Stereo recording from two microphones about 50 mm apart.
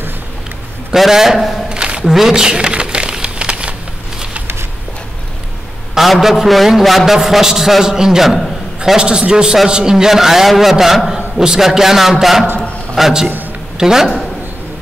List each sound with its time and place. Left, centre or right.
0.9 s a man's voice: centre
1.7 s a sound: centre
5.9 s a man's voice: centre
8.9 s a man's voice: centre